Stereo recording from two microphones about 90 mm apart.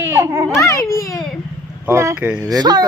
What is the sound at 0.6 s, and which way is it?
Speech, 35° left (ahead or behind).